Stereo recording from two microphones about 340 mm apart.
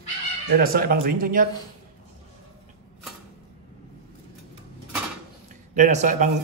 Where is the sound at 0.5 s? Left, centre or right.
Right.